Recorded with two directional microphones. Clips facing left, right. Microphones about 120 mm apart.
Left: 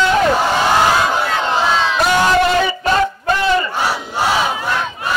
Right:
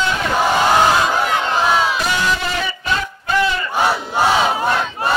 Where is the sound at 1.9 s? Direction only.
50° left (ahead or behind).